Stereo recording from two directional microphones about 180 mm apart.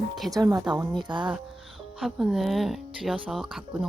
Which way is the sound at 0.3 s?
20° right (ahead or behind).